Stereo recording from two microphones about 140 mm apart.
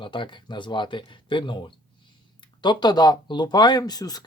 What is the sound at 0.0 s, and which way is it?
Speech, 35° left (ahead or behind).